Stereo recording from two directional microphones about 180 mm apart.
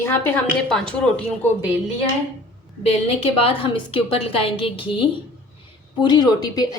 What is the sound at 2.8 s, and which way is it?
A woman's voice, 35° left (ahead or behind).